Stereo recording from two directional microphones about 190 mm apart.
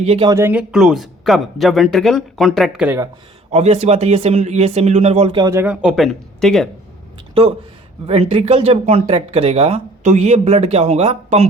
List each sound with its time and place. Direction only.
0.0 s speech: 30° right (ahead or behind)
0.3 s speech: 15° right (ahead or behind)
3.5 s speech: 35° right (ahead or behind)
5.4 s speech: 15° right (ahead or behind)
5.8 s speech: centre (ahead or behind)
8.0 s speech: 30° right (ahead or behind)